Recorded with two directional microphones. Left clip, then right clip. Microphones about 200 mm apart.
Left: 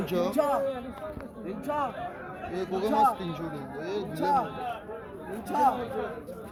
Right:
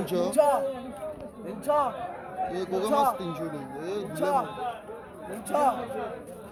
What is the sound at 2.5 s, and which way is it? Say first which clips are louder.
A man's voice: even; 5° right (ahead or behind).